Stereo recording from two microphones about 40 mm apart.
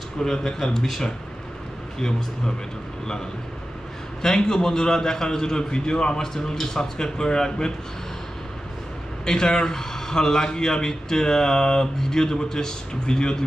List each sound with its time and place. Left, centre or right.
0.2 s speech: centre
4.2 s speech: centre
9.2 s speech: centre